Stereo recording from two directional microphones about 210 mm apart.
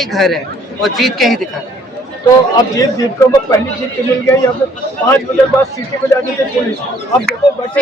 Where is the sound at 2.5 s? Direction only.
15° left (ahead or behind).